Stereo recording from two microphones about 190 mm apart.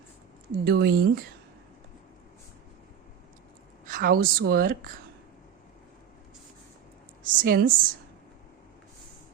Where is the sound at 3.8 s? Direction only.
45° right (ahead or behind).